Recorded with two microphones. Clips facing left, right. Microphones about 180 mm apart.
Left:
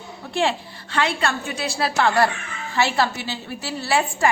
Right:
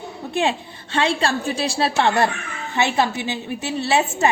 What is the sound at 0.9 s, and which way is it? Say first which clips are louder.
A woman's voice: right 3 dB; 30° right (ahead or behind).